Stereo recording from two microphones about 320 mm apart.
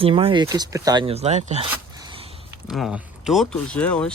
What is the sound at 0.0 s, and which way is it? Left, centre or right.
Speech, centre.